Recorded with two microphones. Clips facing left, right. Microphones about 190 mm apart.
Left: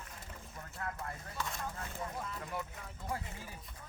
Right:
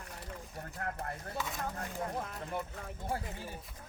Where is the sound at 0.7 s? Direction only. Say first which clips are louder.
Right 2 dB; 50° right (ahead or behind).